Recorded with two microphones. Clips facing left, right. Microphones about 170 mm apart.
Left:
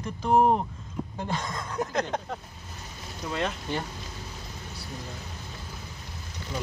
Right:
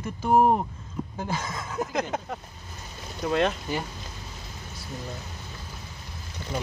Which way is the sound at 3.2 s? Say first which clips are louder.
Right 7 dB; 60° right (ahead or behind).